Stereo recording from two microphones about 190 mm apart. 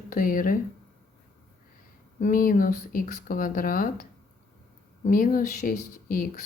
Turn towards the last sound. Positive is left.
turn(degrees=50)  # may be behind; listen again after turning